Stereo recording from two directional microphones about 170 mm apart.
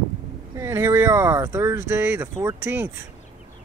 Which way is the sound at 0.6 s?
15° right (ahead or behind).